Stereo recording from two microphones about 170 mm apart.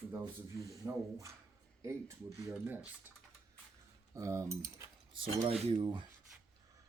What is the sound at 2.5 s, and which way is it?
Speech, 10° right (ahead or behind).